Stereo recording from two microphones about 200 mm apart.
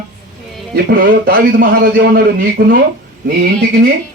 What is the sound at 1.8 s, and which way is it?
Speech, 55° right (ahead or behind).